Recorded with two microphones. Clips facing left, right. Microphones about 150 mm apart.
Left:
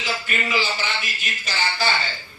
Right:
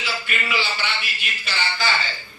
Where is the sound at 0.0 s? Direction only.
40° left (ahead or behind).